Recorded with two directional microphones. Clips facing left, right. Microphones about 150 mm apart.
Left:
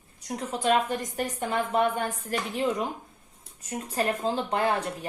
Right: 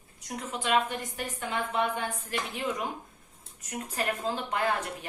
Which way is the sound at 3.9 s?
30° left (ahead or behind).